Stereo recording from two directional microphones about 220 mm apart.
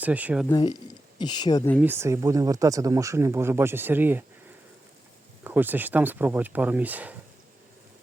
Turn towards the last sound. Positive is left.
turn(degrees=-5)  # may be behind; listen again after turning